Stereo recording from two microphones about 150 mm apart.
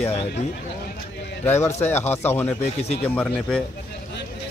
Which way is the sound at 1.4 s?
15° left (ahead or behind).